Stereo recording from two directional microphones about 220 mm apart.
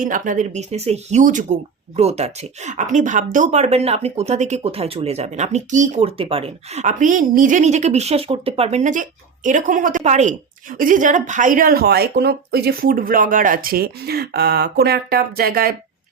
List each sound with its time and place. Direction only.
0.0 s speech: 35° right (ahead or behind)